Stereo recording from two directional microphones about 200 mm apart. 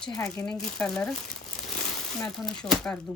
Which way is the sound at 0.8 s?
Centre (ahead or behind).